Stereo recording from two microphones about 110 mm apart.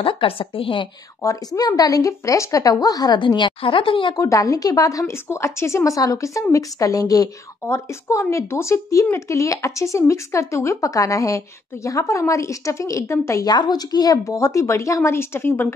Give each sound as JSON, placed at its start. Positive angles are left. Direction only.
{"t": 0.0, "sound": "a woman's voice", "side_deg": 55}
{"t": 1.2, "sound": "speech", "side_deg": 30}
{"t": 4.1, "sound": "speech", "side_deg": 30}